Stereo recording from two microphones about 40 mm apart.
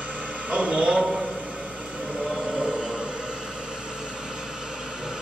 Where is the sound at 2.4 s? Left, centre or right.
Right.